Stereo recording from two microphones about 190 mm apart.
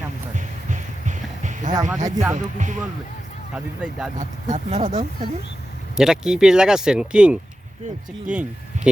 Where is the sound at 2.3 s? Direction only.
40° right (ahead or behind).